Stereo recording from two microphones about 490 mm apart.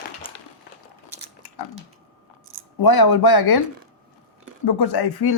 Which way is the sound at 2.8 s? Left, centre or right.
Left.